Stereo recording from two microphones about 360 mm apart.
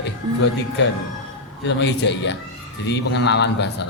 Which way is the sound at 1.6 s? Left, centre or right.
Left.